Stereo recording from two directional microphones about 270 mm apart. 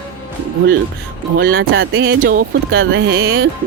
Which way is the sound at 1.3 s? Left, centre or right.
Right.